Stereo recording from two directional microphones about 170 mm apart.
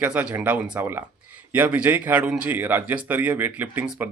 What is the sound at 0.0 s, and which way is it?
Speech, 10° right (ahead or behind).